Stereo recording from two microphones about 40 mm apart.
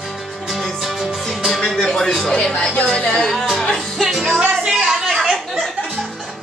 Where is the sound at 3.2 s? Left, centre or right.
Centre.